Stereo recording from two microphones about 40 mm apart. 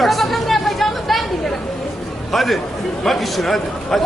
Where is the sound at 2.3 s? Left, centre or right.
Centre.